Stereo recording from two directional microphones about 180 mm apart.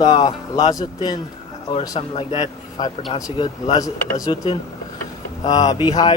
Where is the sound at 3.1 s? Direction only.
20° left (ahead or behind).